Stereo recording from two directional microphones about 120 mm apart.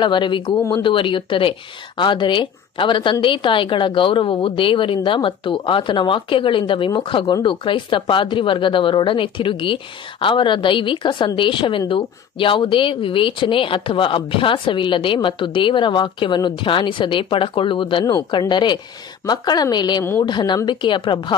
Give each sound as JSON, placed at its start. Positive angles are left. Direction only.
{"t": 0.0, "sound": "a woman's voice", "side_deg": 40}